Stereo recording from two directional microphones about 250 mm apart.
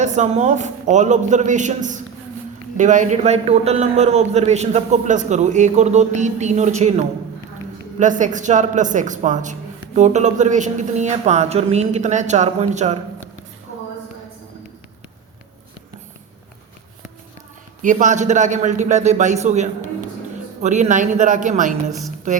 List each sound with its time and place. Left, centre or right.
0.0 s a man's voice: right
17.8 s a man's voice: right